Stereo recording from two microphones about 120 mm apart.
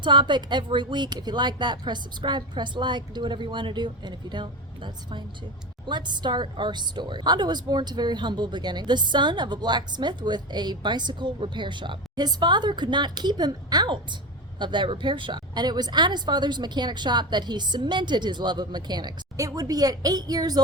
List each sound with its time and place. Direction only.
0.0 s a woman's voice: 40° right (ahead or behind)